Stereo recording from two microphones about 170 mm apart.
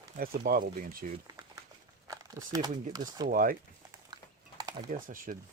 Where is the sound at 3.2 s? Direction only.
55° right (ahead or behind).